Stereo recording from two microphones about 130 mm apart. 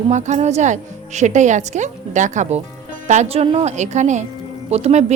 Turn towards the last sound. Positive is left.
turn(degrees=-55)  # may be behind; listen again after turning